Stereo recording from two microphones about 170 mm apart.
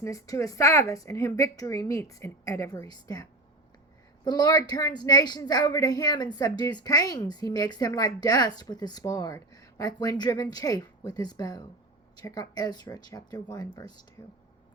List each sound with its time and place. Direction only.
0.0 s a woman's voice: 20° left (ahead or behind)